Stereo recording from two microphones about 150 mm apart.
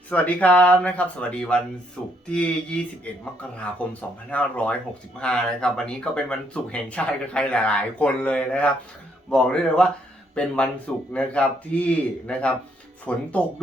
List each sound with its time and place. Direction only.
0.1 s speech: 10° left (ahead or behind)